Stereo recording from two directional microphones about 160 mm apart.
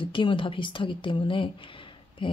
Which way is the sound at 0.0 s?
35° left (ahead or behind).